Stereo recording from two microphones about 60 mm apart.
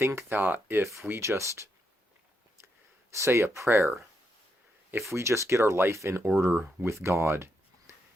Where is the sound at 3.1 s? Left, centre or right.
Right.